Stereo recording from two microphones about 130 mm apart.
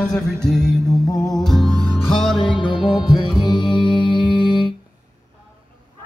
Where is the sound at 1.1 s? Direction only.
Centre (ahead or behind).